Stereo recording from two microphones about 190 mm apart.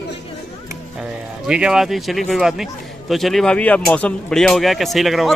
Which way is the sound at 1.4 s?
5° right (ahead or behind).